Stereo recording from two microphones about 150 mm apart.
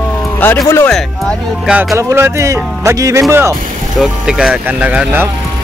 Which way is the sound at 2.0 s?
20° right (ahead or behind).